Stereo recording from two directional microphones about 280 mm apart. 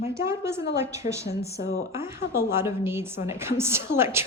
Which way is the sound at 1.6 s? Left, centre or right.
Left.